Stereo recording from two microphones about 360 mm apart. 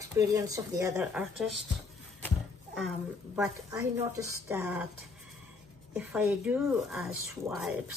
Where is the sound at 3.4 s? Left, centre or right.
Centre.